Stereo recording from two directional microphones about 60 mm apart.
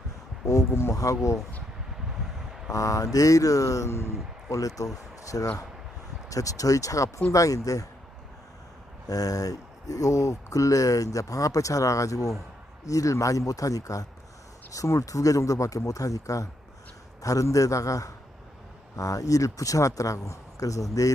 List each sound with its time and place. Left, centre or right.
0.4 s speech: left
0.9 s speech: left
2.7 s speech: left
3.8 s speech: left
9.0 s speech: left